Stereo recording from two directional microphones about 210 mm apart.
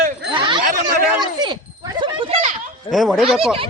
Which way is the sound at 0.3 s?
25° right (ahead or behind).